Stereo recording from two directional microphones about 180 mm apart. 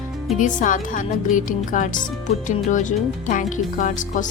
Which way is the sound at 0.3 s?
45° left (ahead or behind).